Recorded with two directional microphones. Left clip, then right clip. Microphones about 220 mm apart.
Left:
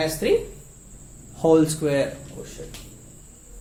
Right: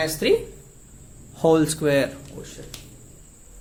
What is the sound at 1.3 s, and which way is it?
Speech, 30° right (ahead or behind).